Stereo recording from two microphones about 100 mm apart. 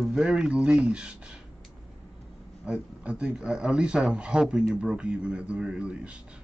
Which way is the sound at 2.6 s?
10° right (ahead or behind).